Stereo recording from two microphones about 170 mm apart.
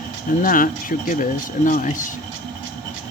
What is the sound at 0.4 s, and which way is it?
Speech, 55° left (ahead or behind).